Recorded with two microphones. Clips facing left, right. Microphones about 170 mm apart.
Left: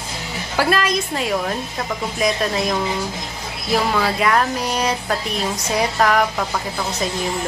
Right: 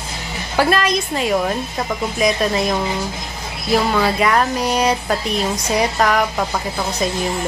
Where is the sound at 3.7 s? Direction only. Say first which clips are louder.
Right 3 dB; centre (ahead or behind).